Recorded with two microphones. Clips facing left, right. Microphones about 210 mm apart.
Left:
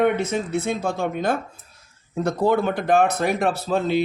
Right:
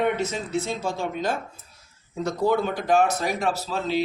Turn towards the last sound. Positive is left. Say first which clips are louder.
# left 4 dB
turn(degrees=55)  # may be behind; listen again after turning